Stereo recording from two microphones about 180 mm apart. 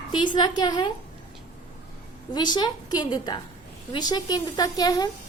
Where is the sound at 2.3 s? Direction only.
25° left (ahead or behind).